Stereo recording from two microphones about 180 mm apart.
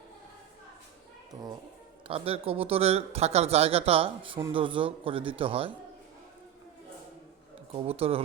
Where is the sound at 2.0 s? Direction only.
30° right (ahead or behind).